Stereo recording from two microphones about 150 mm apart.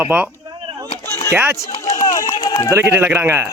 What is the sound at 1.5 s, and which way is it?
Run, 20° left (ahead or behind).